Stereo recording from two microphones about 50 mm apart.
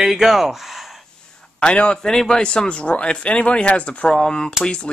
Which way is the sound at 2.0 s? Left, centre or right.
Centre.